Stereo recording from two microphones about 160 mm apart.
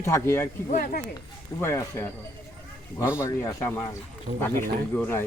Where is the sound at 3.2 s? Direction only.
20° left (ahead or behind).